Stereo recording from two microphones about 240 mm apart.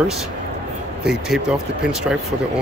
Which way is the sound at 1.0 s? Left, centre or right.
Centre.